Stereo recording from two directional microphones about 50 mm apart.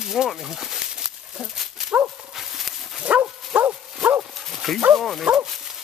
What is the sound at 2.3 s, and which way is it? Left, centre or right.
Horse, centre.